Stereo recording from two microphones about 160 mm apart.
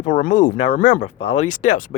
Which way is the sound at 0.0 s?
50° left (ahead or behind).